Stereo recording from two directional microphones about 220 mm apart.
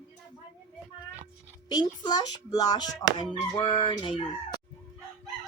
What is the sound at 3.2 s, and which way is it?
Crowing, 20° left (ahead or behind).